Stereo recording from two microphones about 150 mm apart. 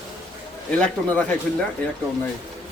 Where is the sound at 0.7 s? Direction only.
10° left (ahead or behind).